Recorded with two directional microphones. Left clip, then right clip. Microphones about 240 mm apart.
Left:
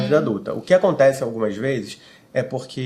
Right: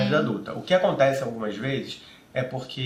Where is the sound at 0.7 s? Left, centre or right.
Left.